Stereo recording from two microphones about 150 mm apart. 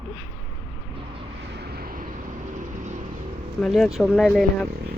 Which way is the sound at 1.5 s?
90° right.